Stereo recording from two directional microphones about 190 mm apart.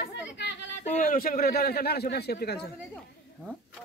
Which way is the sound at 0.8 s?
45° left (ahead or behind).